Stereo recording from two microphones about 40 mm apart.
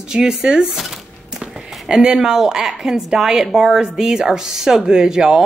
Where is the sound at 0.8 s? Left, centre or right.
Centre.